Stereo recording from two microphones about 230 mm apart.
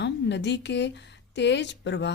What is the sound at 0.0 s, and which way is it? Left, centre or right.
A woman's voice, left.